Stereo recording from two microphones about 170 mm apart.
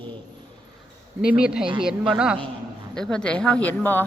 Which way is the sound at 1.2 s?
5° right (ahead or behind).